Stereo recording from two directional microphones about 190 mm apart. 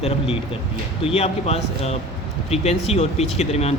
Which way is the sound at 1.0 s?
30° left (ahead or behind).